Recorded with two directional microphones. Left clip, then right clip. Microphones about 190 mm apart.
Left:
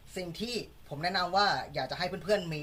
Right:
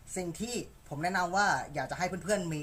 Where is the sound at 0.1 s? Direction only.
15° right (ahead or behind).